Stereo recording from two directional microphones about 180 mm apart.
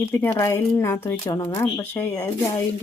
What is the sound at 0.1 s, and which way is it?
Speech, 15° left (ahead or behind).